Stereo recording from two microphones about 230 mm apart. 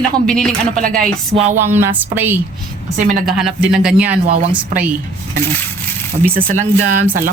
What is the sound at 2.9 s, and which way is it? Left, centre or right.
Speech, right.